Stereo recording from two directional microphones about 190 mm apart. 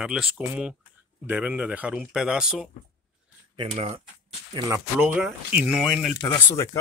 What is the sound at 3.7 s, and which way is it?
Speech, 30° right (ahead or behind).